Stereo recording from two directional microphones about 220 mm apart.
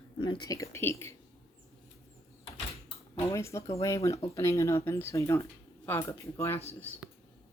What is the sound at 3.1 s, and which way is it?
Speech, 10° left (ahead or behind).